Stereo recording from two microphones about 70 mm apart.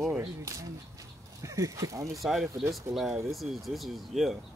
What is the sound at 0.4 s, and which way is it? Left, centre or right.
Speech, right.